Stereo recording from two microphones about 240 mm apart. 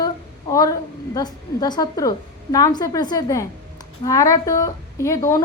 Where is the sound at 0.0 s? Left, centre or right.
Centre.